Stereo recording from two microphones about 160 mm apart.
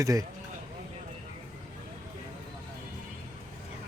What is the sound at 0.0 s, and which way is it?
Speech, 20° right (ahead or behind).